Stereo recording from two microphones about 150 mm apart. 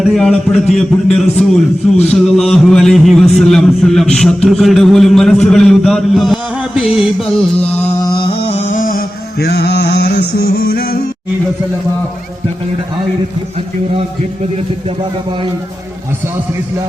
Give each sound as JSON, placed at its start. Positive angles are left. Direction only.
{"t": 0.0, "sound": "a man's voice", "side_deg": 5}
{"t": 8.0, "sound": "music", "side_deg": 35}
{"t": 8.7, "sound": "a sound", "side_deg": 65}